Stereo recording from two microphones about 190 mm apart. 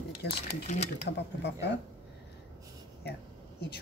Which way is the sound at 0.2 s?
60° left (ahead or behind).